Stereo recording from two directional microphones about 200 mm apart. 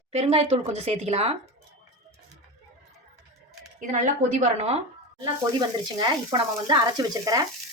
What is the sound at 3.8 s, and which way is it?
A woman's voice, 40° right (ahead or behind).